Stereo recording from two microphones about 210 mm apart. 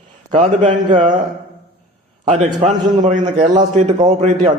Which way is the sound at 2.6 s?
30° right (ahead or behind).